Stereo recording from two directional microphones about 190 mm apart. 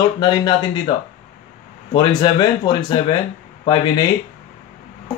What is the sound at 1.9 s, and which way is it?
Speech, 20° left (ahead or behind).